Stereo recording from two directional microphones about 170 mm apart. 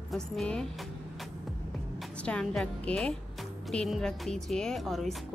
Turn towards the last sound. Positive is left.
turn(degrees=0)  # may be behind; listen again after turning